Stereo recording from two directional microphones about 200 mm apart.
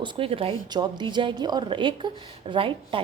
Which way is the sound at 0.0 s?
25° right (ahead or behind).